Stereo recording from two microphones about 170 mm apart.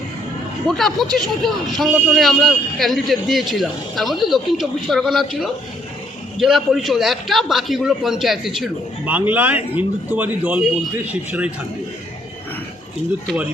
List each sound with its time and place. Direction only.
0.7 s a man's voice: centre (ahead or behind)